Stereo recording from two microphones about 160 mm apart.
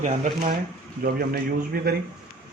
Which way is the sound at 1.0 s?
65° right (ahead or behind).